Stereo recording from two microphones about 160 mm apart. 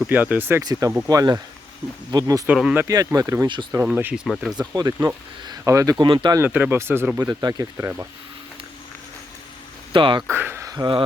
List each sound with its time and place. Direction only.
0.0 s speech: 10° right (ahead or behind)
0.6 s speech: 25° right (ahead or behind)
2.5 s speech: 5° right (ahead or behind)
2.8 s speech: 20° right (ahead or behind)
3.7 s speech: 10° right (ahead or behind)
4.7 s speech: 25° right (ahead or behind)
6.4 s speech: 10° right (ahead or behind)
9.9 s speech: 30° right (ahead or behind)
10.2 s a sound: 15° right (ahead or behind)